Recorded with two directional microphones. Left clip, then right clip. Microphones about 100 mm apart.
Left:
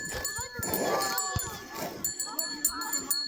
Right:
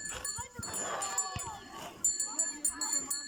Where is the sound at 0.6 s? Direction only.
55° left (ahead or behind).